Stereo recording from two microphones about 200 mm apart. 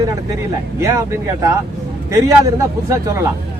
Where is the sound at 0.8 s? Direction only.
15° right (ahead or behind).